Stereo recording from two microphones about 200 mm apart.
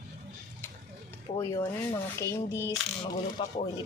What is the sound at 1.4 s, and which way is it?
Speech, 15° left (ahead or behind).